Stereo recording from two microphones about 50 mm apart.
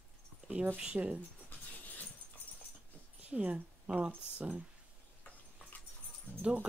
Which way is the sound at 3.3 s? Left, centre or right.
Right.